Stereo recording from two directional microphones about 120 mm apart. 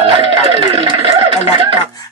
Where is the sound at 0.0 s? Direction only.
45° right (ahead or behind).